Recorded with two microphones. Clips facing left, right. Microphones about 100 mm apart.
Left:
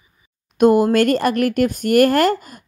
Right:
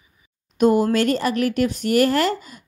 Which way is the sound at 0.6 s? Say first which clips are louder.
Left 4 dB; 55° left (ahead or behind).